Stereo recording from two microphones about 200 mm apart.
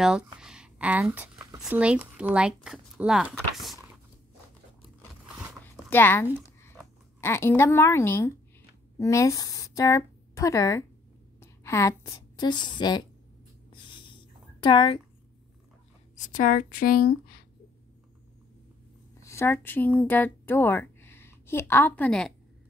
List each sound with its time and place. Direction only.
0.0 s a sound: 5° right (ahead or behind)
1.6 s speech: 5° right (ahead or behind)
5.4 s zipper: 5° right (ahead or behind)
5.9 s a woman's voice: 10° left (ahead or behind)
13.7 s a sound: 25° left (ahead or behind)
16.2 s speech: 40° left (ahead or behind)
19.2 s a woman's voice: 15° left (ahead or behind)